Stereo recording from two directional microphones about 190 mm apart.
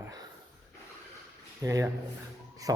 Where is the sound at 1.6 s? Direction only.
15° right (ahead or behind).